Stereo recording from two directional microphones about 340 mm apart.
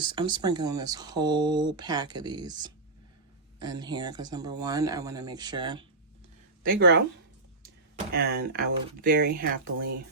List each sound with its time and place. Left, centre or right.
0.0 s speech: centre
6.6 s speech: right
8.1 s speech: right